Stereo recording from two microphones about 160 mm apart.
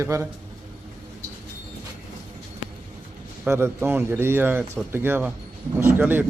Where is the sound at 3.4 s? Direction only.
15° right (ahead or behind).